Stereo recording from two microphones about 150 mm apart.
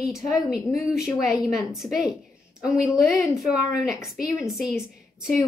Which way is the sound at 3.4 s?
5° right (ahead or behind).